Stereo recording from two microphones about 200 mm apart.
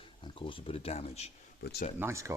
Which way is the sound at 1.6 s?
50° left (ahead or behind).